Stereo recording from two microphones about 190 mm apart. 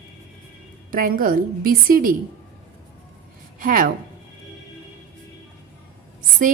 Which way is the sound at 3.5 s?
45° right (ahead or behind).